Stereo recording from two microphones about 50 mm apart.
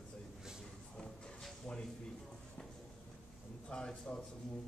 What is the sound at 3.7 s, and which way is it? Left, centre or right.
Speech, centre.